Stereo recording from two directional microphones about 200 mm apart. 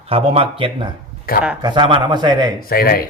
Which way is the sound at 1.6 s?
25° right (ahead or behind).